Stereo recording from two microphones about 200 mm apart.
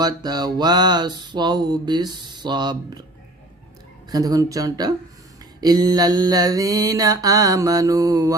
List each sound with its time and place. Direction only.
0.0 s mantra: 20° right (ahead or behind)
4.1 s mantra: 20° right (ahead or behind)